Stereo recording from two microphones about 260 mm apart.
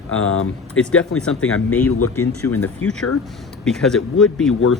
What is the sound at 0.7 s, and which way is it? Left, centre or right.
Speech, centre.